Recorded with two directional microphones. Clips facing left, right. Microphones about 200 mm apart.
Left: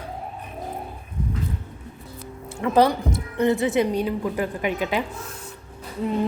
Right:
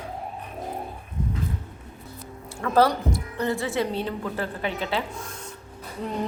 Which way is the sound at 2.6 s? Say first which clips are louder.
Left 2 dB; 15° left (ahead or behind).